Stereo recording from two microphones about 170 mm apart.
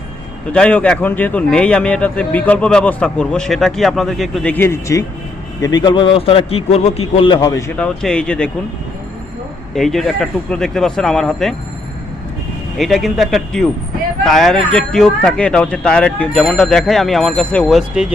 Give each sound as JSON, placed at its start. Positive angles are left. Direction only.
{"t": 0.5, "sound": "a man's voice", "side_deg": 5}
{"t": 7.8, "sound": "a man's voice", "side_deg": 5}
{"t": 9.7, "sound": "a man's voice", "side_deg": 0}
{"t": 12.7, "sound": "a man's voice", "side_deg": 0}